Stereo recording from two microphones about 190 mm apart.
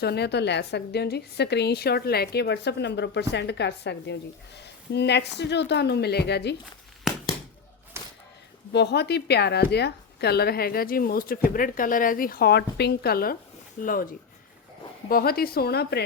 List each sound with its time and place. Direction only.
0.0 s a woman's voice: 60° left (ahead or behind)
7.1 s a sound: centre (ahead or behind)
7.9 s whip: 15° right (ahead or behind)
8.7 s a woman's voice: 65° left (ahead or behind); by 14.1 s 45° left (ahead or behind)
15.1 s a woman's voice: 50° left (ahead or behind)